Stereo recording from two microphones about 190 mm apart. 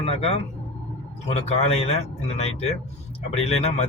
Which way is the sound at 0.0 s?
30° left (ahead or behind).